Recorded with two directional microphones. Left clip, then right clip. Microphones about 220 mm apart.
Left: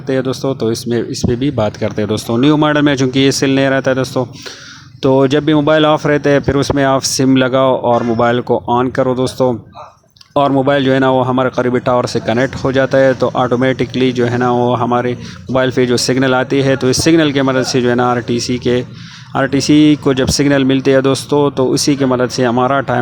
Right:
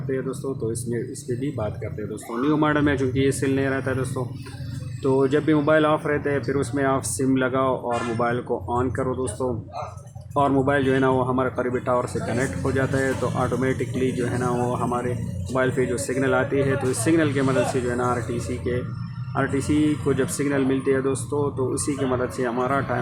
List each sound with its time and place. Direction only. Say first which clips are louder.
0.1 s speech: left 12 dB; 35° left (ahead or behind)